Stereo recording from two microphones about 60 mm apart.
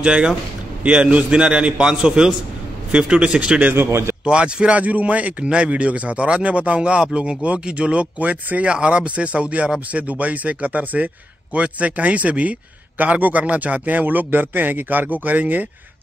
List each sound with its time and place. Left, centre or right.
0.0 s a man's voice: centre
3.7 s speech: right
4.2 s speech: centre